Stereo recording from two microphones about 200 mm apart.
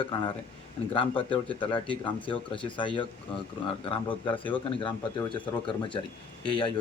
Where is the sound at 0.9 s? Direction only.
25° left (ahead or behind).